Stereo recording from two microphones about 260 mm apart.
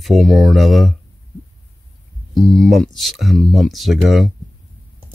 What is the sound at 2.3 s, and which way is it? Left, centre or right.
Speech, centre.